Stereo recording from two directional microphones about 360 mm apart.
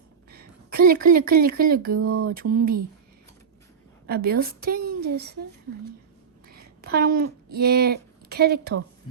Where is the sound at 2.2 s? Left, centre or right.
Right.